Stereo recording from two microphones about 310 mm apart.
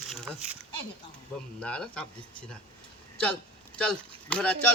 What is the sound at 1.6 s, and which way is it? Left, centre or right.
Speech, centre.